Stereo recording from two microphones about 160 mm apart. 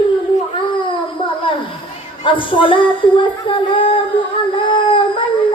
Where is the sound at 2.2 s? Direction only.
30° left (ahead or behind).